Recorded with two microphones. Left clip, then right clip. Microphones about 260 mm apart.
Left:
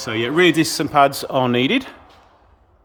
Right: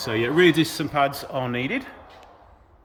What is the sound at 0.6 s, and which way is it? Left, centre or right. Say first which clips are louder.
A man's voice: left 7 dB; centre.